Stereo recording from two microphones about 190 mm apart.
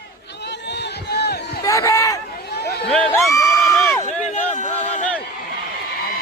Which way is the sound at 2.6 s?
60° left (ahead or behind).